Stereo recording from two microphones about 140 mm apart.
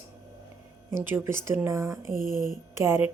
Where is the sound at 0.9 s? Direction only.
15° right (ahead or behind).